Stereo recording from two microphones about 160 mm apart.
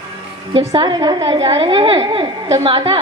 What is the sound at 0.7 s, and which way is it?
A woman's voice, 25° right (ahead or behind).